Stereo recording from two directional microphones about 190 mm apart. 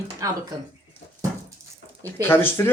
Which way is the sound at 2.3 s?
10° left (ahead or behind).